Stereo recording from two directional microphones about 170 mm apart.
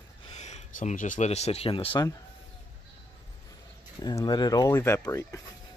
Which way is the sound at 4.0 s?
25° left (ahead or behind).